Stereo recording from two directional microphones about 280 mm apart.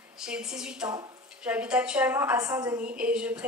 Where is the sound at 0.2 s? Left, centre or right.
Centre.